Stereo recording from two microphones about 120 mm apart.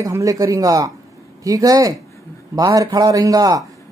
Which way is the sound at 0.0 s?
30° right (ahead or behind).